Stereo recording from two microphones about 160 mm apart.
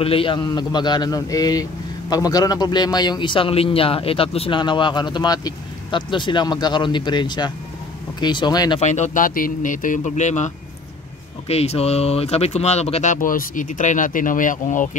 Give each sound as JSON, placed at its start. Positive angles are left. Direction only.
{"t": 0.0, "sound": "a man's voice", "side_deg": 35}
{"t": 8.8, "sound": "speech", "side_deg": 45}